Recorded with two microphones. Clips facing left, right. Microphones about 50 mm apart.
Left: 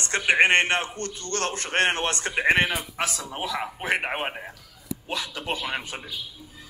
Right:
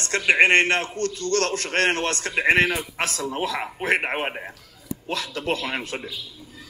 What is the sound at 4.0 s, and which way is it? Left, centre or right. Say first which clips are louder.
Speech: right 2 dB; centre.